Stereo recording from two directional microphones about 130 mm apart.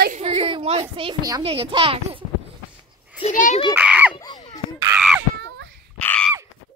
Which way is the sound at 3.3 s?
80° left.